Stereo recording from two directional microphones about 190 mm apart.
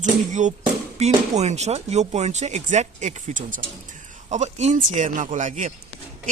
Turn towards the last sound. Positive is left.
turn(degrees=-40)  # may be behind; listen again after turning